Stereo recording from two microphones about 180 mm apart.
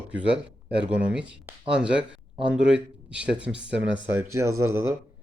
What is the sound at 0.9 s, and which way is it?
A man's voice, 5° right (ahead or behind).